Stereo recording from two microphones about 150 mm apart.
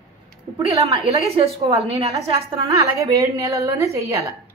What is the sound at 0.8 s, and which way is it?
A woman's voice, 40° right (ahead or behind).